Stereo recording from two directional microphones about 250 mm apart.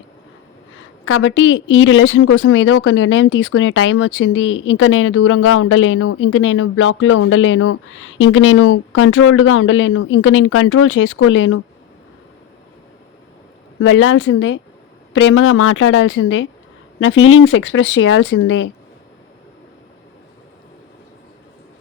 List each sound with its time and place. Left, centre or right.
1.0 s a woman's voice: left
13.8 s a woman's voice: left